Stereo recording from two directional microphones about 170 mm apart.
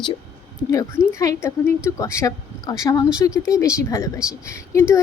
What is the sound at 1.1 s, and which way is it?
A woman's voice, 15° left (ahead or behind).